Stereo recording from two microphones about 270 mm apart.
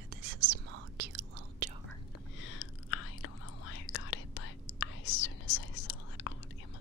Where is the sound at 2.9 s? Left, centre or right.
Left.